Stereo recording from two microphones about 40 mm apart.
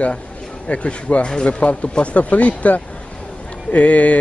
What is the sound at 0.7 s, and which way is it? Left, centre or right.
Speech, left.